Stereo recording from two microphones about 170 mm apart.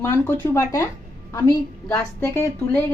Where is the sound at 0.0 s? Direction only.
15° left (ahead or behind).